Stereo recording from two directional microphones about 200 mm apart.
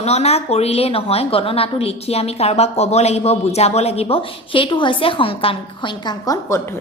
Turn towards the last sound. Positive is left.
turn(degrees=15)  # may be behind; listen again after turning